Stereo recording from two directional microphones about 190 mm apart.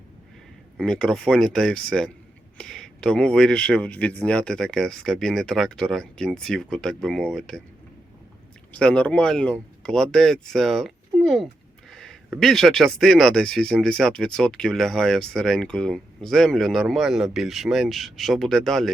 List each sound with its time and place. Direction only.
0.8 s speech: 5° left (ahead or behind)
8.7 s speech: 5° left (ahead or behind)